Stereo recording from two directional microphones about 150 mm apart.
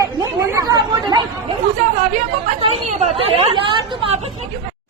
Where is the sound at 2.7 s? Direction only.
40° right (ahead or behind).